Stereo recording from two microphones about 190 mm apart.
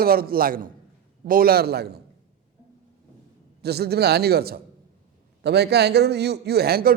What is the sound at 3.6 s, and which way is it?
A man's voice, 55° right (ahead or behind).